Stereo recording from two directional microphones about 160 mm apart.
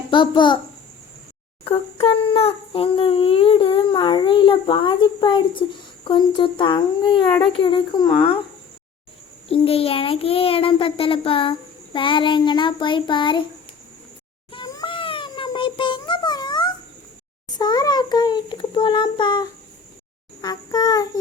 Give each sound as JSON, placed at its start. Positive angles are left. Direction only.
{"t": 0.1, "sound": "child singing", "side_deg": 30}
{"t": 1.6, "sound": "a child's voice", "side_deg": 35}
{"t": 6.1, "sound": "child singing", "side_deg": 30}
{"t": 9.5, "sound": "a child's voice", "side_deg": 35}
{"t": 11.9, "sound": "child singing", "side_deg": 30}
{"t": 14.5, "sound": "a sound", "side_deg": 25}
{"t": 17.5, "sound": "child singing", "side_deg": 25}